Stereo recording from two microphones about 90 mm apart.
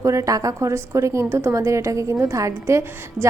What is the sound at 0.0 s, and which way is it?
A woman's voice, 35° right (ahead or behind).